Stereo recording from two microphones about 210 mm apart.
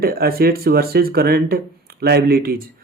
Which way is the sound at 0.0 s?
45° right (ahead or behind).